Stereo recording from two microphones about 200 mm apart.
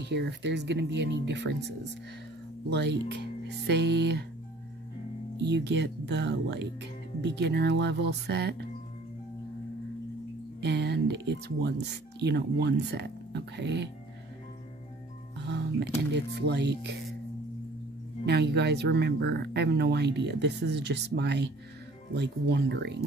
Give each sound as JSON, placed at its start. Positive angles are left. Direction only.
{"t": 0.0, "sound": "speech", "side_deg": -55}
{"t": 2.7, "sound": "speech", "side_deg": -60}
{"t": 5.4, "sound": "speech", "side_deg": -60}
{"t": 10.6, "sound": "speech", "side_deg": -55}
{"t": 16.1, "sound": "speech", "side_deg": -55}
{"t": 18.2, "sound": "speech", "side_deg": -60}